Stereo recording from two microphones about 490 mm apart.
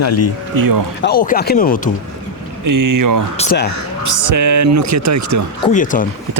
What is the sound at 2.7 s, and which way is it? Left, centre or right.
Speech, right.